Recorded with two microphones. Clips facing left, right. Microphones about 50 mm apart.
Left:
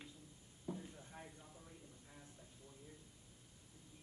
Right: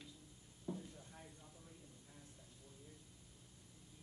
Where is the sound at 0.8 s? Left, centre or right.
Left.